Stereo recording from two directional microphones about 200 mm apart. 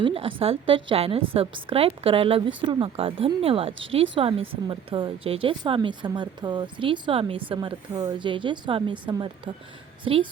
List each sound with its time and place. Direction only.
0.0 s speech: 25° right (ahead or behind)